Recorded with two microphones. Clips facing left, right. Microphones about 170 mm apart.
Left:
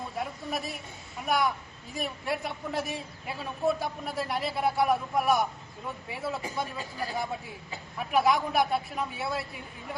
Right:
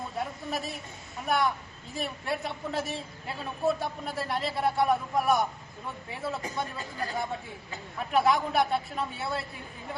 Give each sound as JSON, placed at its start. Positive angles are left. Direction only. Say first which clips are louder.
{"t": 1.3, "sound": "speech", "louder": "even", "side_deg": 0}